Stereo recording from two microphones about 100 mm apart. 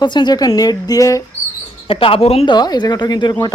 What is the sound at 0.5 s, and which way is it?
Music, 40° left (ahead or behind).